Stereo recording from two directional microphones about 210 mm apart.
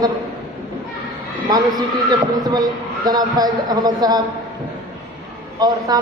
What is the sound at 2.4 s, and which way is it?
A man's voice, 20° right (ahead or behind).